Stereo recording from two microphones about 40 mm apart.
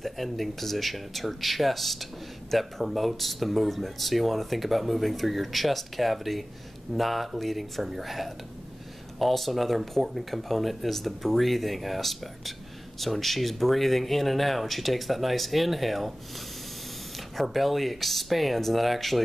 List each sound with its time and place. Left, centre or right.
0.0 s speech: centre
17.4 s speech: centre